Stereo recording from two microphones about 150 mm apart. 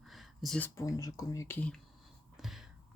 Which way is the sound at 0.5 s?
15° left (ahead or behind).